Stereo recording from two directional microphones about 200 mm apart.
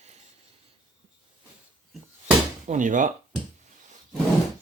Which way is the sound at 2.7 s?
40° right (ahead or behind).